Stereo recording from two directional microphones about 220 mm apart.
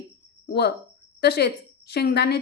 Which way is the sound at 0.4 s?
45° left (ahead or behind).